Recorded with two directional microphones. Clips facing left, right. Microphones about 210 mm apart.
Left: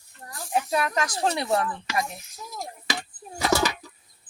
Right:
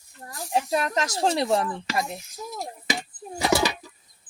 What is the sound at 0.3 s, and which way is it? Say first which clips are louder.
Speech: right 1 dB; 25° right (ahead or behind).